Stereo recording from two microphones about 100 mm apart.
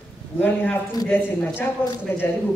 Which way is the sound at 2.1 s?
20° left (ahead or behind).